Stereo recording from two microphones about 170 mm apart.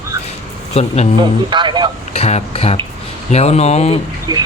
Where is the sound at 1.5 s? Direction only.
25° right (ahead or behind).